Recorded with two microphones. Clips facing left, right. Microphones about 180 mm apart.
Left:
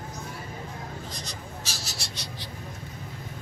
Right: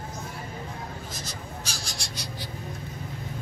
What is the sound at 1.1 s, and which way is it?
Crow, centre (ahead or behind).